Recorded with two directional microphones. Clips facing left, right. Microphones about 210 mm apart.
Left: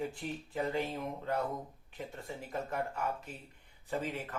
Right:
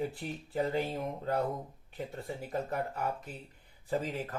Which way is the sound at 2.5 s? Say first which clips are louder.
Right 2 dB; 35° right (ahead or behind).